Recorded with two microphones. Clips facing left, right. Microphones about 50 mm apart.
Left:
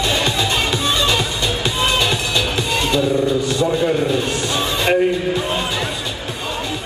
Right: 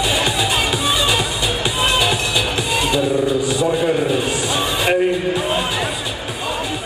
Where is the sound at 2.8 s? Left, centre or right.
Centre.